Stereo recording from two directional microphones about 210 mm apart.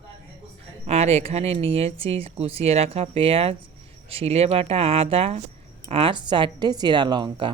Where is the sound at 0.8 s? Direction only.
30° right (ahead or behind).